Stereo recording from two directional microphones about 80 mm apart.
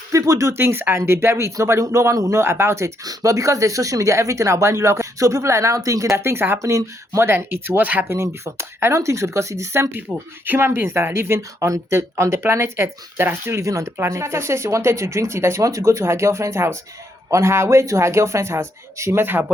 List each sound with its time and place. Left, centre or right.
0.1 s speech: right
3.0 s speech: right
6.6 s speech: right
8.0 s speech: right
13.6 s speech: right